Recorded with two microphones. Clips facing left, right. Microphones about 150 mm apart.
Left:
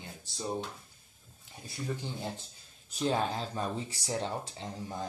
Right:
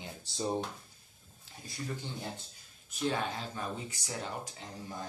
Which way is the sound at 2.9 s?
35° left (ahead or behind).